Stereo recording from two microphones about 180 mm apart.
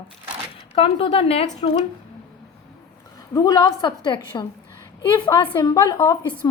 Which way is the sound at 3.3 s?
20° left (ahead or behind).